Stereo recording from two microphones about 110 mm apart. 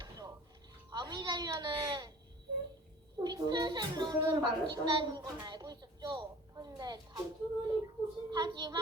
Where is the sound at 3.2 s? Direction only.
40° right (ahead or behind).